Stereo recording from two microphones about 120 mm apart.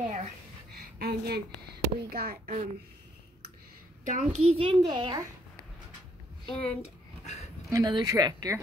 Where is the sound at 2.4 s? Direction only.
90° right.